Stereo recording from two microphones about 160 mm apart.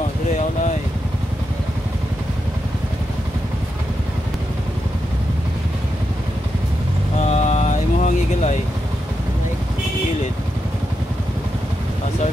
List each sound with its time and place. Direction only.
7.2 s vehicle: 45° left (ahead or behind)